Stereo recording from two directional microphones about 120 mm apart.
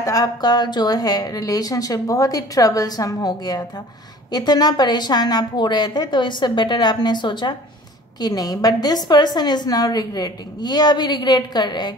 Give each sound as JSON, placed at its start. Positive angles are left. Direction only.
{"t": 0.0, "sound": "a woman's voice", "side_deg": 30}